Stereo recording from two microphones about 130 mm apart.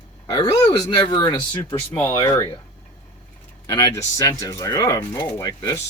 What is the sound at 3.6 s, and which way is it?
Speech, 35° left (ahead or behind).